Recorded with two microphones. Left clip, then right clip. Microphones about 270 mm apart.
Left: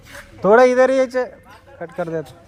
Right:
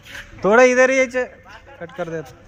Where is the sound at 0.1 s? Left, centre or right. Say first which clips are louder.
Left 2 dB; centre.